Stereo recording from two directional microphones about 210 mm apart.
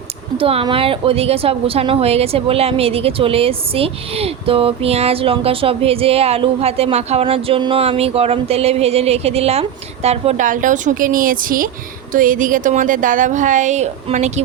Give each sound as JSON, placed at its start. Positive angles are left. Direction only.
{"t": 0.3, "sound": "a woman's voice", "side_deg": -25}